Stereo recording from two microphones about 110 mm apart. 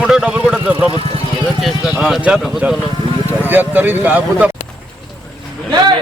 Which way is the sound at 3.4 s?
20° right (ahead or behind).